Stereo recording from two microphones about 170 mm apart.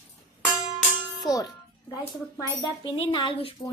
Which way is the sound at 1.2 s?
20° left (ahead or behind).